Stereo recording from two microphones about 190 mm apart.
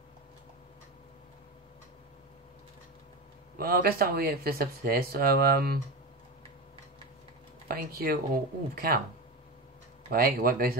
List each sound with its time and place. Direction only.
3.5 s speech: 50° right (ahead or behind)
7.6 s speech: 50° right (ahead or behind)
10.0 s speech: 50° right (ahead or behind)